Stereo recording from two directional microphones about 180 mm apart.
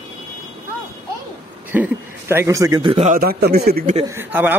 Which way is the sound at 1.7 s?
10° right (ahead or behind).